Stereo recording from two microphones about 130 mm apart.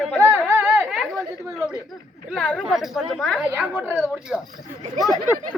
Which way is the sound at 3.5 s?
15° right (ahead or behind).